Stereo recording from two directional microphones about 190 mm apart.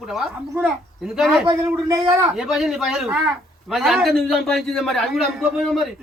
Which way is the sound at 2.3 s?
Centre (ahead or behind).